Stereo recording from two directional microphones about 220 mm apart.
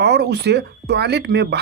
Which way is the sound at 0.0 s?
50° right (ahead or behind).